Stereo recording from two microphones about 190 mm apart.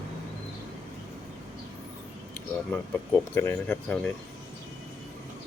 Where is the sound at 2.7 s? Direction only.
10° left (ahead or behind).